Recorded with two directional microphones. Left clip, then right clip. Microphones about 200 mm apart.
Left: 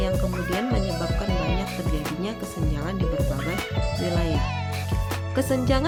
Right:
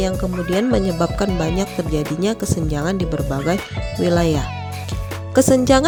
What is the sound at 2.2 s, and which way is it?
Speech, 45° right (ahead or behind).